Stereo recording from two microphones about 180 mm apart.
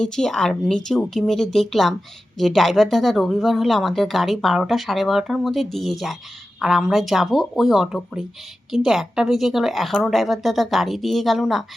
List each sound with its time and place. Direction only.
0.0 s speech: 5° left (ahead or behind)